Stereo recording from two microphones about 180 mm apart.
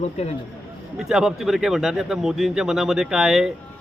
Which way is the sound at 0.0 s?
35° left (ahead or behind).